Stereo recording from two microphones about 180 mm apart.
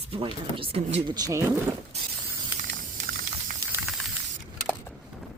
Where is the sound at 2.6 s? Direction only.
45° right (ahead or behind).